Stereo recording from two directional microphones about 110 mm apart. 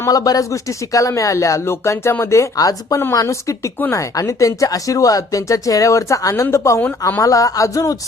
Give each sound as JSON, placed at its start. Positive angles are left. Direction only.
{"t": 0.0, "sound": "speech", "side_deg": 35}
{"t": 7.2, "sound": "speech", "side_deg": 30}